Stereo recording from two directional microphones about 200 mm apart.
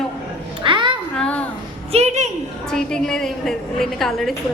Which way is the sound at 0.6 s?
25° right (ahead or behind).